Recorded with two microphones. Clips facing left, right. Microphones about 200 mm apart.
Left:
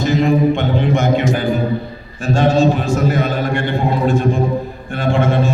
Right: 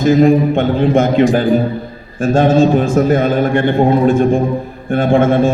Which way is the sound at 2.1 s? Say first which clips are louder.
Right 4 dB; 50° right (ahead or behind).